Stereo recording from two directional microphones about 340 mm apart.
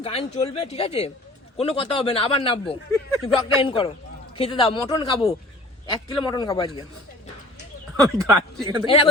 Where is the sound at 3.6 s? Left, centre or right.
Centre.